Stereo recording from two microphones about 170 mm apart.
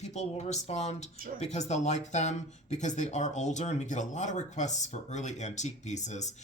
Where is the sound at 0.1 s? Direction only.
40° left (ahead or behind).